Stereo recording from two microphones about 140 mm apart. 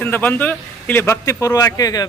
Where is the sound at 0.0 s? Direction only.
15° left (ahead or behind).